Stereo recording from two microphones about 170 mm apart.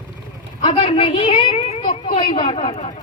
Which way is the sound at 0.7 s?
30° left (ahead or behind).